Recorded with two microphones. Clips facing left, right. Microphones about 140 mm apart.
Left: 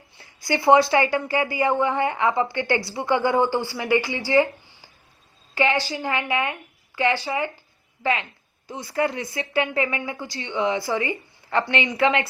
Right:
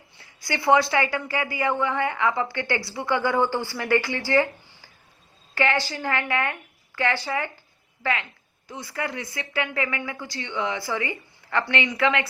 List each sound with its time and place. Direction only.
0.4 s a woman's voice: 25° left (ahead or behind)